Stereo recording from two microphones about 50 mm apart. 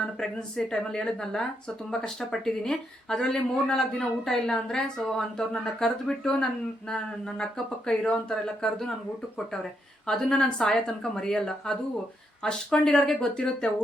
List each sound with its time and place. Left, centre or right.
0.0 s speech: centre
10.1 s speech: centre